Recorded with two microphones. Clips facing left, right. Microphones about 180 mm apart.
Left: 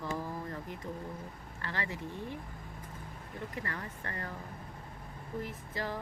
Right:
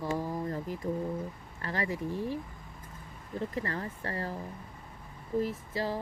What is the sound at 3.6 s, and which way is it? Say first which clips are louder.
Speech: right 5 dB; 25° right (ahead or behind).